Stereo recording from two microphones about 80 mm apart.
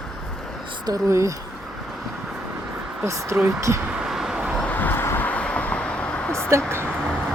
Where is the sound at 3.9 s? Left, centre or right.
Centre.